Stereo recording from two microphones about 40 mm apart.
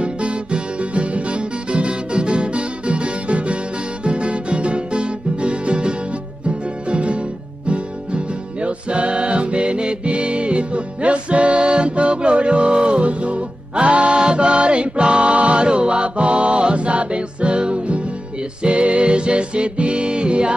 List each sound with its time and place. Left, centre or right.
0.0 s music: right